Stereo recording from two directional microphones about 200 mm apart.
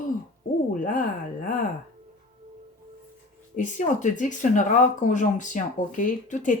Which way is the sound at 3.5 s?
40° left (ahead or behind).